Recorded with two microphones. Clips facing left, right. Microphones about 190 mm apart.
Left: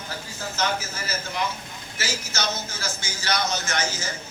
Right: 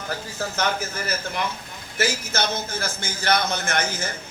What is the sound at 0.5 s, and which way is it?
A man's voice, 60° right (ahead or behind).